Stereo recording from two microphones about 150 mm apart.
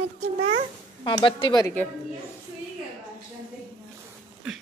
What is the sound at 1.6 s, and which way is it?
Speech, 10° left (ahead or behind).